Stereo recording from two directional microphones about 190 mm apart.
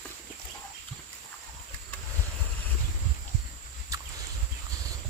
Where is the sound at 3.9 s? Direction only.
15° right (ahead or behind).